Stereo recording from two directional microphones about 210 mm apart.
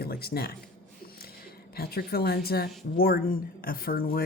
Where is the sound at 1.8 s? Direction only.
45° left (ahead or behind).